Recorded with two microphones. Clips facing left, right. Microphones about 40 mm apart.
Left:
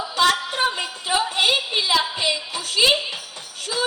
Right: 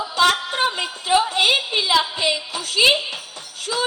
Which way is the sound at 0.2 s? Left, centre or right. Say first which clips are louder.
Right 1 dB; right.